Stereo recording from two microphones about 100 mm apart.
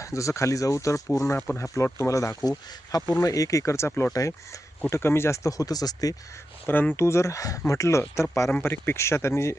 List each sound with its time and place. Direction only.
0.0 s speech: 30° left (ahead or behind)
6.7 s speech: 20° left (ahead or behind)
8.4 s speech: 20° left (ahead or behind)